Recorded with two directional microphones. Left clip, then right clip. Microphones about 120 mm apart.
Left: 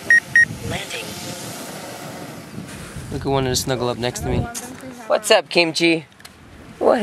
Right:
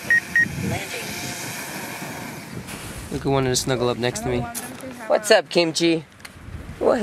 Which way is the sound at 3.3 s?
5° left (ahead or behind).